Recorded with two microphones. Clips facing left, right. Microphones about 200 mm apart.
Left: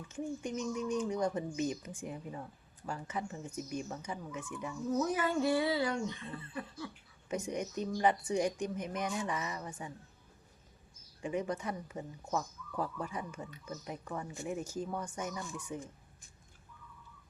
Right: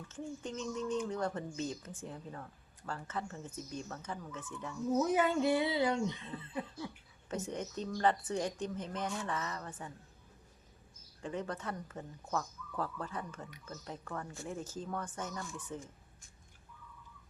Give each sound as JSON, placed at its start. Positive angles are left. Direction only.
{"t": 0.1, "sound": "speech", "side_deg": 15}
{"t": 5.1, "sound": "a sound", "side_deg": -20}
{"t": 7.3, "sound": "speech", "side_deg": 15}
{"t": 11.2, "sound": "speech", "side_deg": 10}